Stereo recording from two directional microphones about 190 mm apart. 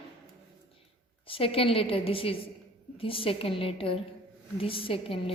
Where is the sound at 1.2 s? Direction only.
30° left (ahead or behind).